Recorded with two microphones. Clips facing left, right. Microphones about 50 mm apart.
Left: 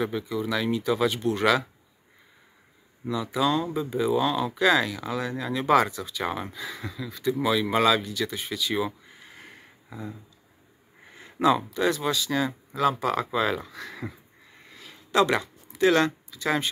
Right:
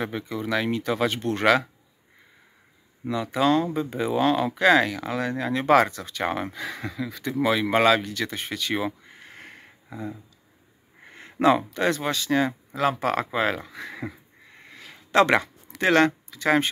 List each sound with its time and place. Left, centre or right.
0.0 s speech: right
3.1 s speech: right
11.1 s speech: right
13.3 s speech: right
13.7 s speech: right
14.7 s a sound: right
15.8 s speech: right